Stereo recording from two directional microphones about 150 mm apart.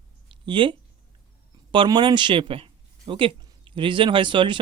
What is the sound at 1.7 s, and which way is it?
Speech, 30° right (ahead or behind).